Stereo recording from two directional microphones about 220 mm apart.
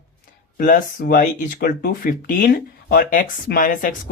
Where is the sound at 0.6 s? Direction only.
40° left (ahead or behind).